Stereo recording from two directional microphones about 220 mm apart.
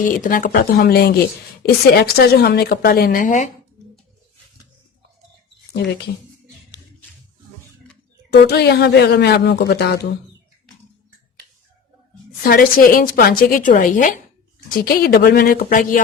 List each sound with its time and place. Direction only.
0.0 s a woman's voice: 40° left (ahead or behind)
5.7 s speech: 50° left (ahead or behind)
8.3 s speech: 50° left (ahead or behind)
12.4 s a woman's voice: 40° left (ahead or behind)